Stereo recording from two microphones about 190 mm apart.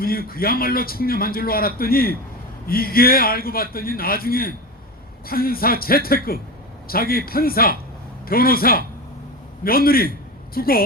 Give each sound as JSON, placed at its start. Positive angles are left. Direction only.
{"t": 0.0, "sound": "a man's voice", "side_deg": 50}